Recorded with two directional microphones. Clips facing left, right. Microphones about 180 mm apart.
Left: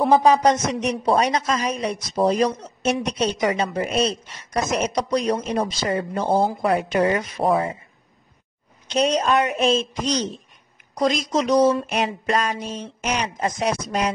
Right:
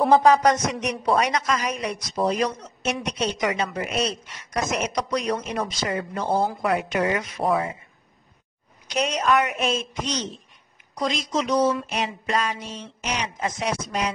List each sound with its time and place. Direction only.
0.1 s a woman's voice: 20° left (ahead or behind)
8.8 s a woman's voice: 35° left (ahead or behind)